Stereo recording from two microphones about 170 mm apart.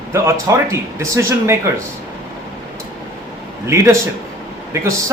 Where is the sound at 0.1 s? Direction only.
15° right (ahead or behind).